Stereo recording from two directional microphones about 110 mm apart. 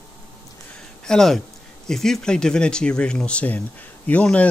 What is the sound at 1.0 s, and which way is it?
Speech, 5° left (ahead or behind).